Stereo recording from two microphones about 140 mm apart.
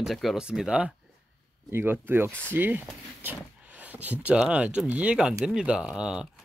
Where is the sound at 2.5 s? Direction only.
15° right (ahead or behind).